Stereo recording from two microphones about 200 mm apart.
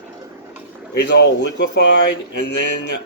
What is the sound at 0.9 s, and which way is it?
Speech, 55° left (ahead or behind).